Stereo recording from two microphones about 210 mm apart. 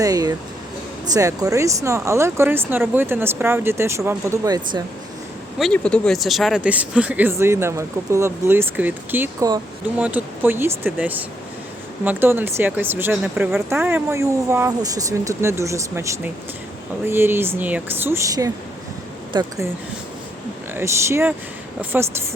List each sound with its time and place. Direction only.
0.0 s speech: 15° right (ahead or behind)
5.5 s speech: centre (ahead or behind); by 19.6 s 20° right (ahead or behind)
20.7 s speech: 10° right (ahead or behind)